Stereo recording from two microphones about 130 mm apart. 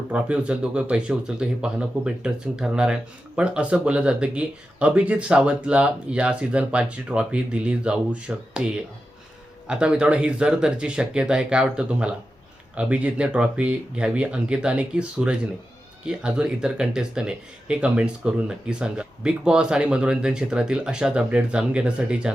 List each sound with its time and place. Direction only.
0.1 s speech: 10° right (ahead or behind)